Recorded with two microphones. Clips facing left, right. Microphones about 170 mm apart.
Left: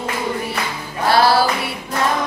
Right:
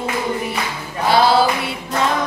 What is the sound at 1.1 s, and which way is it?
Music, 20° right (ahead or behind).